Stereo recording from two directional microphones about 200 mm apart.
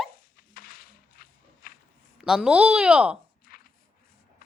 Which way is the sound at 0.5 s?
45° left (ahead or behind).